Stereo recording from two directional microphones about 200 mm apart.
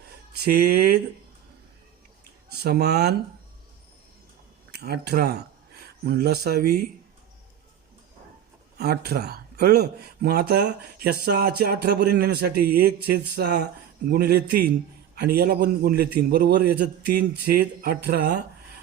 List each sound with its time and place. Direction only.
0.4 s speech: 50° right (ahead or behind)
2.5 s speech: 55° right (ahead or behind)
4.8 s speech: 55° right (ahead or behind)
8.8 s speech: 50° right (ahead or behind)